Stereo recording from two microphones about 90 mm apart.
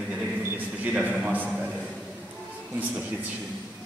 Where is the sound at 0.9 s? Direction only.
15° right (ahead or behind).